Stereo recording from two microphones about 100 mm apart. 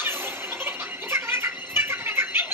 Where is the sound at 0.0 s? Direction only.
20° right (ahead or behind).